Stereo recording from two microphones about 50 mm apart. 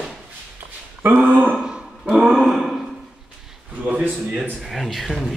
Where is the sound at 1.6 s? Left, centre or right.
Centre.